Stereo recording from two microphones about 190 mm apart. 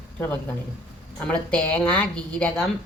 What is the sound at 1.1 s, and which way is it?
A woman's voice, 5° left (ahead or behind).